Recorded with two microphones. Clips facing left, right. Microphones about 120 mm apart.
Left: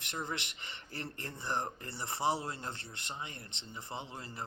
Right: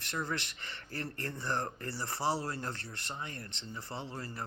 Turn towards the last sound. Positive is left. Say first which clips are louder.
# right 2 dB
turn(degrees=20)  # may be behind; listen again after turning